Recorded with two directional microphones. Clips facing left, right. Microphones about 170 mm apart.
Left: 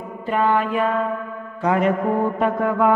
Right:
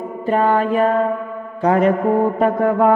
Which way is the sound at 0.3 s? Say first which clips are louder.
Right 3 dB; 40° right (ahead or behind).